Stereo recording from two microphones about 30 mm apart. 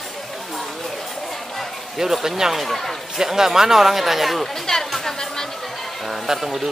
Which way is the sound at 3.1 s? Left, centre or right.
Centre.